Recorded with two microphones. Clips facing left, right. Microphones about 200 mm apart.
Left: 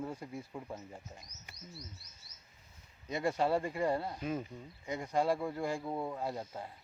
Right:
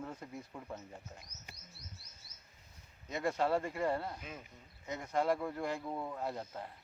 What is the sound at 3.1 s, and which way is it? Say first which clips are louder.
Speech: left 2 dB; 15° left (ahead or behind).